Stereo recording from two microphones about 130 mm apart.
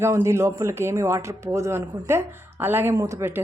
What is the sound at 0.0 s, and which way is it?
Speech, 20° right (ahead or behind).